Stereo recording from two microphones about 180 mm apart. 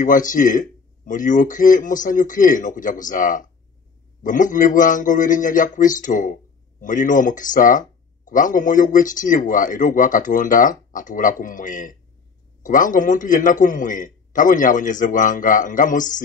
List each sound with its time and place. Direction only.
0.0 s speech: 45° left (ahead or behind)